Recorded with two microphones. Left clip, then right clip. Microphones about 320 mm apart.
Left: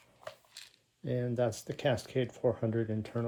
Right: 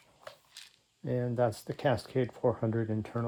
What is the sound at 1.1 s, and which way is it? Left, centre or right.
Speech, centre.